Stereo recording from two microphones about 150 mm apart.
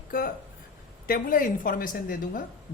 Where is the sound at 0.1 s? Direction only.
70° left (ahead or behind).